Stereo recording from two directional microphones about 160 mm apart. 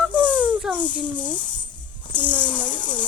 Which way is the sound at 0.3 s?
10° right (ahead or behind).